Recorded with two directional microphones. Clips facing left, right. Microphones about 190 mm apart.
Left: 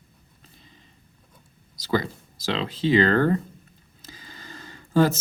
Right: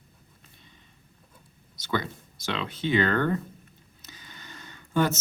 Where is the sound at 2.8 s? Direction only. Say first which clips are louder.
Left 5 dB; 35° left (ahead or behind).